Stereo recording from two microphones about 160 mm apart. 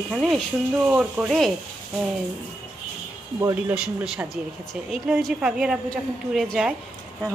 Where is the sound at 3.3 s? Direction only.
20° right (ahead or behind).